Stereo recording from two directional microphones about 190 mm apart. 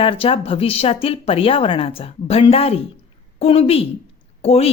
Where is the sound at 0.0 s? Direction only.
30° left (ahead or behind).